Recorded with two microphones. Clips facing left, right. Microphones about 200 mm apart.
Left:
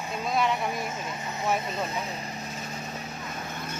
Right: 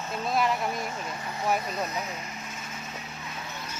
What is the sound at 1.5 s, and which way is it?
Vehicle, 25° left (ahead or behind).